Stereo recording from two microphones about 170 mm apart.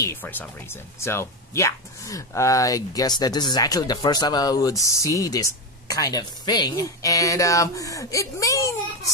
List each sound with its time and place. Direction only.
0.0 s speech: 10° left (ahead or behind)